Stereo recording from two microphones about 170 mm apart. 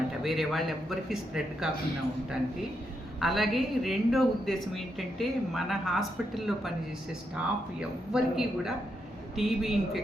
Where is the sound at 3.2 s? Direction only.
Centre (ahead or behind).